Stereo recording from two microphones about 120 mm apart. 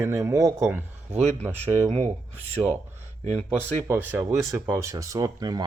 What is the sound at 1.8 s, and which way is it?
Speech, 55° right (ahead or behind).